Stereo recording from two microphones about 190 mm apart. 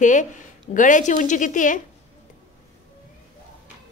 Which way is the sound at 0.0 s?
40° left (ahead or behind).